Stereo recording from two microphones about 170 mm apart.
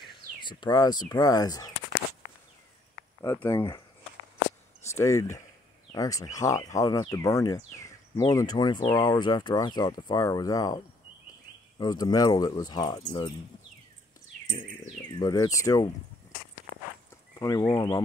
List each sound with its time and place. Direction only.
0.0 s speech: 25° left (ahead or behind)
3.2 s speech: 15° left (ahead or behind)
4.8 s speech: 15° left (ahead or behind)
11.8 s speech: 20° left (ahead or behind)
15.1 s speech: 20° left (ahead or behind)
17.4 s speech: 20° left (ahead or behind)